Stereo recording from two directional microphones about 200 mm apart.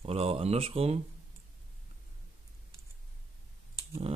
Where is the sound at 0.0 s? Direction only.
30° right (ahead or behind).